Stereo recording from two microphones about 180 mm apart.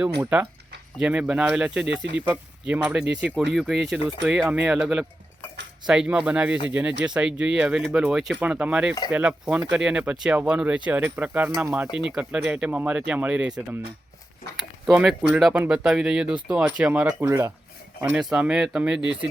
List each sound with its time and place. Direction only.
0.2 s speech: 5° right (ahead or behind)
18.1 s speech: 5° right (ahead or behind)